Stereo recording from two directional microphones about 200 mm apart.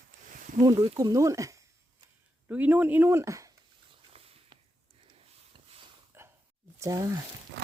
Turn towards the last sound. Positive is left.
turn(degrees=-15)  # may be behind; listen again after turning